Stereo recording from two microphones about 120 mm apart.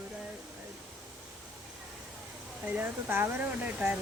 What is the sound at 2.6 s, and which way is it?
Speech, 15° right (ahead or behind).